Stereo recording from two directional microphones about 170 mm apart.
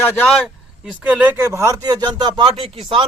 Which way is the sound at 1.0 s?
10° right (ahead or behind).